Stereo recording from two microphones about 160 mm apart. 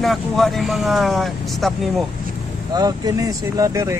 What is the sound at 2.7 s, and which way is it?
Speech, 25° right (ahead or behind).